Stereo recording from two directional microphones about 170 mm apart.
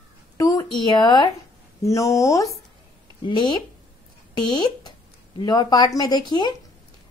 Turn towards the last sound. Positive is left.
turn(degrees=25)  # may be behind; listen again after turning